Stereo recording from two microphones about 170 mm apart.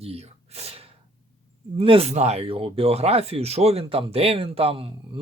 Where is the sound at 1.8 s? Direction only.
35° right (ahead or behind).